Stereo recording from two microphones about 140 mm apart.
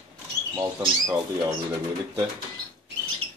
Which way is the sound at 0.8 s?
30° right (ahead or behind).